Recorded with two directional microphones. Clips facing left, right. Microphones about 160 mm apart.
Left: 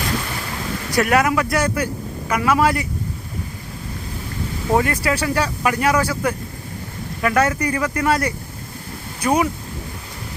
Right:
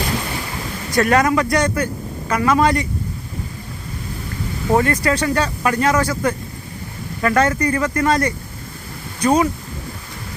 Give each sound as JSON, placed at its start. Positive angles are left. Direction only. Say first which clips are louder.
{"t": 0.9, "sound": "speech", "louder": "right 2 dB", "side_deg": 10}
{"t": 4.8, "sound": "speech", "louder": "right 2 dB", "side_deg": 10}